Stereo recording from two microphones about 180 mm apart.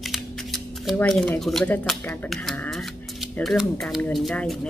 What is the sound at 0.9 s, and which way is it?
Speech, 10° left (ahead or behind).